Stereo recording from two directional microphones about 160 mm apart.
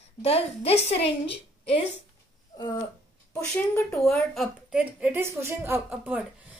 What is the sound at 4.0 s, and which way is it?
Speech, centre (ahead or behind).